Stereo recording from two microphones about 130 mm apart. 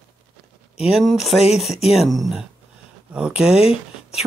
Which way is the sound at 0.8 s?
Centre (ahead or behind).